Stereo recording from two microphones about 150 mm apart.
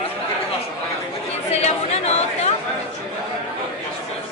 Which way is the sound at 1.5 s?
45° left (ahead or behind).